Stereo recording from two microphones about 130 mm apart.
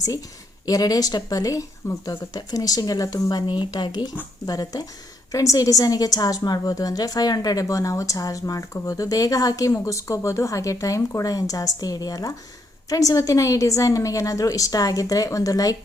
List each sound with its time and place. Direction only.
0.6 s a woman's voice: 30° left (ahead or behind)